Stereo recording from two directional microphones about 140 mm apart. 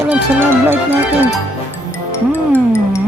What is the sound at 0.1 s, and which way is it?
Speech, 15° right (ahead or behind).